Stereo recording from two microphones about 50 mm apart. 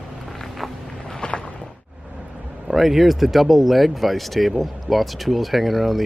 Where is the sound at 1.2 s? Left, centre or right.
Centre.